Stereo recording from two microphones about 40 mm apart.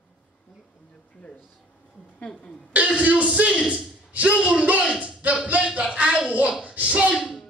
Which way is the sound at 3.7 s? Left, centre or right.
Centre.